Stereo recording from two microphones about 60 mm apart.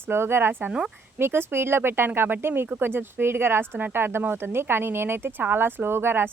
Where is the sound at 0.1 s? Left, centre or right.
Right.